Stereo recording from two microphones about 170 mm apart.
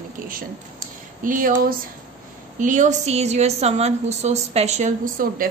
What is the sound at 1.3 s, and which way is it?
Speech, 55° right (ahead or behind).